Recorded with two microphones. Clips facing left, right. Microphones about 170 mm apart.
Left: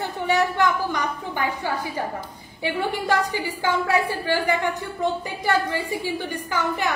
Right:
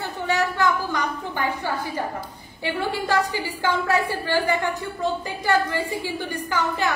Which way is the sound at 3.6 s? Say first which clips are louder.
Even; 15° left (ahead or behind).